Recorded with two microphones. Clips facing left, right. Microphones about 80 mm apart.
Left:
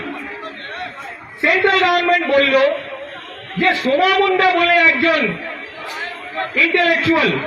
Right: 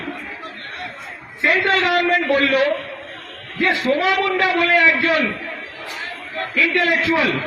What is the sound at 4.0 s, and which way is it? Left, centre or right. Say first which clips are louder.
A man's voice: left 4 dB; right.